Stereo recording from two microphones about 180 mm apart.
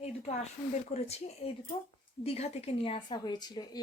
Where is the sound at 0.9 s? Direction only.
35° left (ahead or behind).